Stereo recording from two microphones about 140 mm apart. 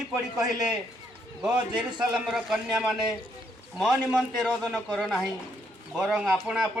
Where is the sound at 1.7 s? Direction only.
30° right (ahead or behind).